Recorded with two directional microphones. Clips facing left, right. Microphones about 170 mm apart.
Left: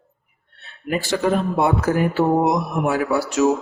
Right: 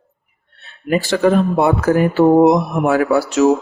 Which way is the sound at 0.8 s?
90° right.